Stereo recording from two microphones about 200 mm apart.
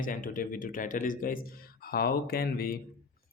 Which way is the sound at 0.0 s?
45° left (ahead or behind).